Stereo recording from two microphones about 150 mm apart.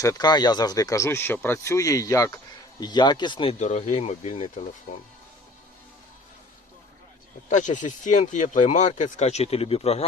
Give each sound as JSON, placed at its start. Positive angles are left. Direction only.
{"t": 0.0, "sound": "speech", "side_deg": 25}
{"t": 3.6, "sound": "speech", "side_deg": 50}
{"t": 7.5, "sound": "speech", "side_deg": 55}